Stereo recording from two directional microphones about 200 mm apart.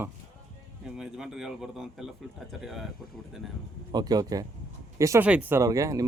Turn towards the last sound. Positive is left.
turn(degrees=-15)  # may be behind; listen again after turning